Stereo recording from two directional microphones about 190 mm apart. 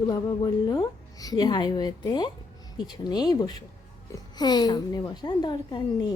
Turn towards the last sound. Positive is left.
turn(degrees=25)  # may be behind; listen again after turning